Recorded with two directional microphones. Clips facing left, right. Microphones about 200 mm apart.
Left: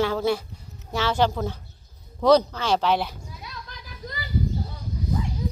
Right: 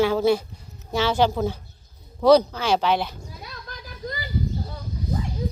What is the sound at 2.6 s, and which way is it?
Speech, centre (ahead or behind).